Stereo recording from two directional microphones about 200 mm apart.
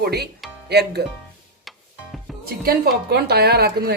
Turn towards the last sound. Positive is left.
turn(degrees=-50)  # may be behind; listen again after turning